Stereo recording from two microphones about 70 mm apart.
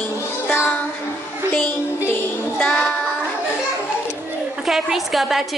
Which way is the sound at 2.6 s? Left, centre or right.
Left.